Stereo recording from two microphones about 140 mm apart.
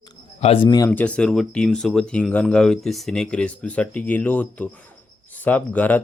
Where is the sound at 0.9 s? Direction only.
10° left (ahead or behind).